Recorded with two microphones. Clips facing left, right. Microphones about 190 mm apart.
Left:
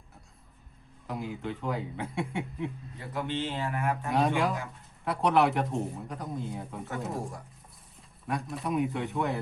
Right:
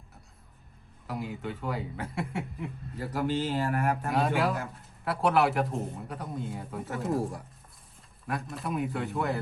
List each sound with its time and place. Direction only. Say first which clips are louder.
1.0 s a man's voice: even; centre (ahead or behind)
3.2 s speech: right 5 dB; 40° right (ahead or behind)
4.1 s a man's voice: left 2 dB; centre (ahead or behind)
8.3 s a man's voice: left 2 dB; centre (ahead or behind)